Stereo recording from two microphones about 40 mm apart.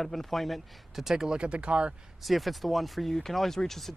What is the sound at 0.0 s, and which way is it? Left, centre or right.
Speech, centre.